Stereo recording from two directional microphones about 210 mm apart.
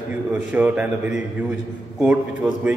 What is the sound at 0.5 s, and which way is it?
Speech, 5° right (ahead or behind).